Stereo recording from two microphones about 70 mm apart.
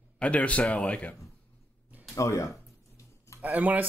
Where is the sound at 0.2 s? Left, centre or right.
Centre.